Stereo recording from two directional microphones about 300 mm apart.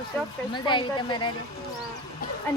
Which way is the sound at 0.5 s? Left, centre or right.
Centre.